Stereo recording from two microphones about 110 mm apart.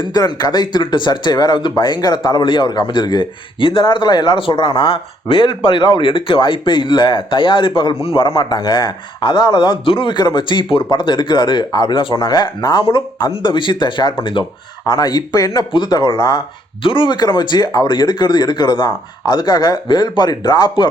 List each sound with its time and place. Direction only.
0.0 s speech: 40° left (ahead or behind); by 8.3 s 55° left (ahead or behind)
8.4 s speech: 40° left (ahead or behind)
14.8 s speech: 35° left (ahead or behind)
16.8 s speech: 50° left (ahead or behind)